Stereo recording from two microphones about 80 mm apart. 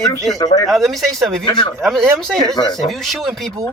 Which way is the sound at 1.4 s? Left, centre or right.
Left.